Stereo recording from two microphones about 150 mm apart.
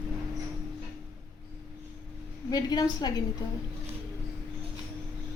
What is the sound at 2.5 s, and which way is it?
Speech, 25° left (ahead or behind).